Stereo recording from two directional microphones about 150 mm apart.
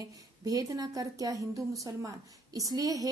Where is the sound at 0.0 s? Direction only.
25° right (ahead or behind).